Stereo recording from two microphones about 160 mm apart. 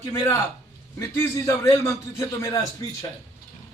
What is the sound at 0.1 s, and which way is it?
A man's voice, 20° left (ahead or behind).